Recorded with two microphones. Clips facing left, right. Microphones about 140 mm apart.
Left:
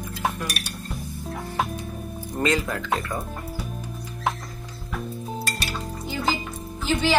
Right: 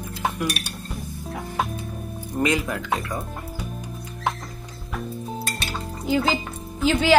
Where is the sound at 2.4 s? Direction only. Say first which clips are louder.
Right 1 dB; 15° right (ahead or behind).